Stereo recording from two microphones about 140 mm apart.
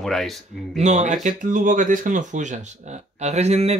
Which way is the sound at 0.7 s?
55° right (ahead or behind).